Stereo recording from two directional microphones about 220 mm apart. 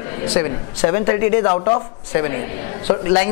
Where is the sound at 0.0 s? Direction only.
20° left (ahead or behind).